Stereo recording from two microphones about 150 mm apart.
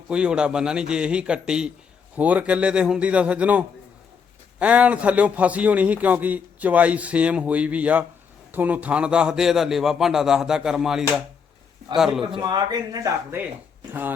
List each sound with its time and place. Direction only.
0.1 s a man's voice: 5° right (ahead or behind)
4.6 s a man's voice: 10° right (ahead or behind)
12.2 s speech: 30° right (ahead or behind)